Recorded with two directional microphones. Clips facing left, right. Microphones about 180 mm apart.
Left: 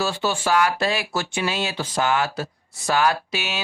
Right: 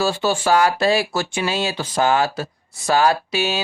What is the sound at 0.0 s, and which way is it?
Speech, 35° right (ahead or behind).